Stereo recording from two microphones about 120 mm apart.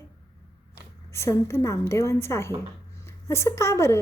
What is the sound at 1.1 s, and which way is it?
A woman's voice, 25° left (ahead or behind).